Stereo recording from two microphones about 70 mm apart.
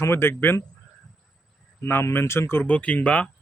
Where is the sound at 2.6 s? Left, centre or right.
Centre.